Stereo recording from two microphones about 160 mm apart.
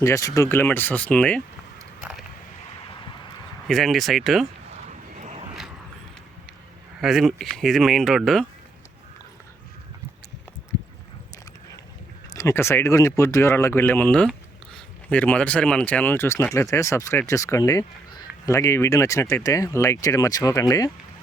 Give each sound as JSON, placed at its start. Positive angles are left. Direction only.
{"t": 0.0, "sound": "speech", "side_deg": 20}
{"t": 2.0, "sound": "a sound", "side_deg": -5}
{"t": 3.7, "sound": "speech", "side_deg": 0}
{"t": 5.1, "sound": "vehicle", "side_deg": -45}
{"t": 7.0, "sound": "speech", "side_deg": 0}
{"t": 12.3, "sound": "speech", "side_deg": 20}